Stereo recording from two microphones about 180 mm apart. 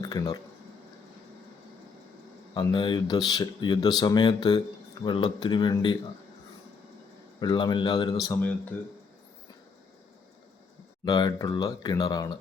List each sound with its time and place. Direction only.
0.0 s a sound: 20° left (ahead or behind)
2.6 s speech: 25° left (ahead or behind)
7.3 s speech: 25° left (ahead or behind)
8.3 s speech: 10° left (ahead or behind)
11.0 s speech: 20° left (ahead or behind)